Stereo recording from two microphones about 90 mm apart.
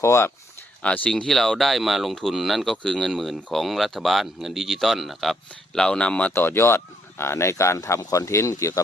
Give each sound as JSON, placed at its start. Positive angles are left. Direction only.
{"t": 0.0, "sound": "speech", "side_deg": 30}
{"t": 0.8, "sound": "speech", "side_deg": 15}
{"t": 6.3, "sound": "speech", "side_deg": 25}